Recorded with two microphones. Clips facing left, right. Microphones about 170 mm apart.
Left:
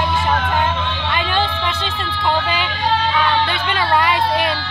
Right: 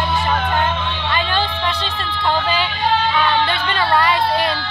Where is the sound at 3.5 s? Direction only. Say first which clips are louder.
Even; 10° left (ahead or behind).